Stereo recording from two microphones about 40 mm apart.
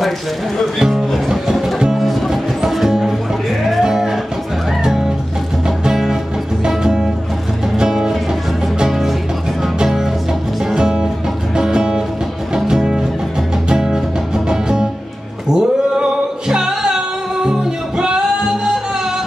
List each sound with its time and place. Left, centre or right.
0.7 s speech: centre
1.3 s music: centre
3.8 s music: centre
5.9 s music: centre